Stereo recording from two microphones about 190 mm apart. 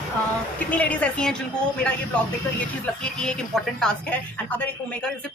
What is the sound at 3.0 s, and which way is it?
Speech, 5° left (ahead or behind).